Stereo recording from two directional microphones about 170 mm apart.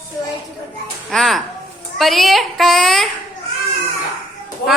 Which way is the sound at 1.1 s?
Centre (ahead or behind).